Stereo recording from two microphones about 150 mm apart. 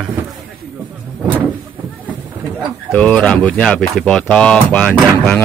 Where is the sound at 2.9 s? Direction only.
5° left (ahead or behind).